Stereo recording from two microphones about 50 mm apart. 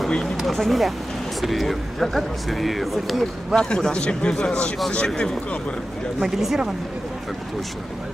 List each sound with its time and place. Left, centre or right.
0.4 s speech: centre
3.5 s a man's voice: centre
6.1 s speech: centre